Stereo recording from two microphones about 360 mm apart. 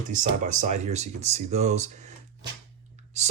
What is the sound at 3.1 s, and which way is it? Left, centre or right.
Speech, centre.